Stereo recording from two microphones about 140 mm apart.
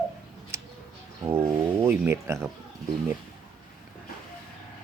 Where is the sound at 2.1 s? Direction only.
20° right (ahead or behind).